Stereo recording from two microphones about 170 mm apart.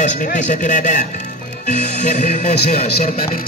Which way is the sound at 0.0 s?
50° left (ahead or behind).